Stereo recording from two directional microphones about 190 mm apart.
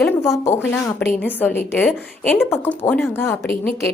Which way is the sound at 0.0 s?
10° left (ahead or behind).